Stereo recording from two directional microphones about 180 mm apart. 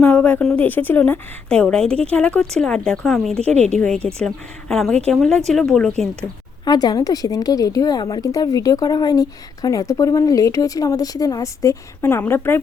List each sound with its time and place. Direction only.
0.0 s a woman's voice: 10° left (ahead or behind)
3.3 s speech: 35° right (ahead or behind)
3.8 s a woman's voice: 5° left (ahead or behind)
6.7 s a woman's voice: 20° left (ahead or behind)